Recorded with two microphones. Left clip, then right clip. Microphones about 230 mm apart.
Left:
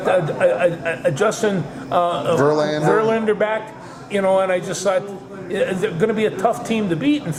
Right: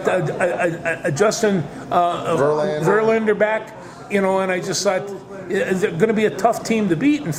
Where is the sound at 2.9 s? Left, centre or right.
Right.